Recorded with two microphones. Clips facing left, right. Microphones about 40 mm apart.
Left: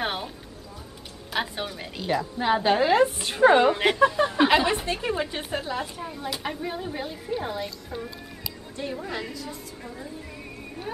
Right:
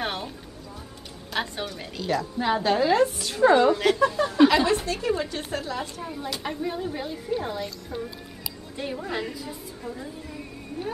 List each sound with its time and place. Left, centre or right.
0.0 s music: centre
1.3 s a woman's voice: centre
3.2 s a woman's voice: left; by 8.1 s centre
9.1 s a woman's voice: centre